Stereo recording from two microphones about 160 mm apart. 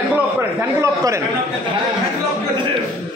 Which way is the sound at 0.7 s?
20° right (ahead or behind).